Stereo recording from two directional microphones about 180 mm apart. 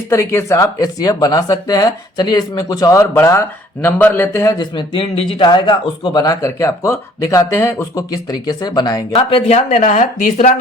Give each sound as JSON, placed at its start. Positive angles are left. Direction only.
{"t": 0.1, "sound": "a man's voice", "side_deg": 15}
{"t": 9.1, "sound": "speech", "side_deg": 35}